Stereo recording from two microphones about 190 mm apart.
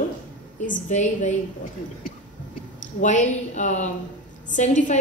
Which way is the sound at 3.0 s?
40° left (ahead or behind).